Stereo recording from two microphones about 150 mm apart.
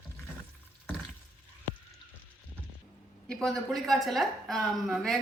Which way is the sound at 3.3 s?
5° left (ahead or behind).